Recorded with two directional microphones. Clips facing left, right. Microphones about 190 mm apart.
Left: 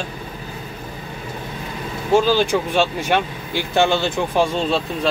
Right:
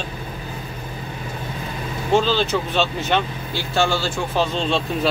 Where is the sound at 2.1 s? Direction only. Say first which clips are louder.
Left 3 dB; 10° left (ahead or behind).